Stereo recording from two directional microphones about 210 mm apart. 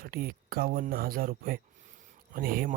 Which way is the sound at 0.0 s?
45° right (ahead or behind).